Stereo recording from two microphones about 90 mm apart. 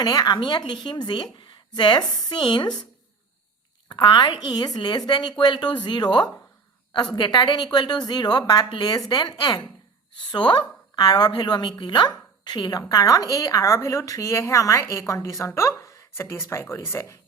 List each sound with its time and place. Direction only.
0.0 s speech: 45° left (ahead or behind)
0.3 s a woman's voice: 60° left (ahead or behind)
2.4 s a woman's voice: 60° left (ahead or behind)
3.8 s a woman's voice: 55° left (ahead or behind)
4.4 s a woman's voice: 50° left (ahead or behind)
10.9 s speech: 50° left (ahead or behind)
12.9 s a woman's voice: 40° left (ahead or behind)